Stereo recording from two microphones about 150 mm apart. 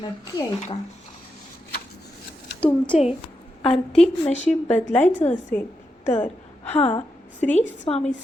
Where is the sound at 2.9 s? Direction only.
Centre (ahead or behind).